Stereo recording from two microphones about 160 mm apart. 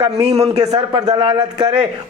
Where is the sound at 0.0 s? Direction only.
40° right (ahead or behind).